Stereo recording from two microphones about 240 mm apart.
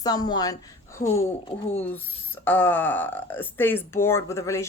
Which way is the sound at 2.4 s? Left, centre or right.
Centre.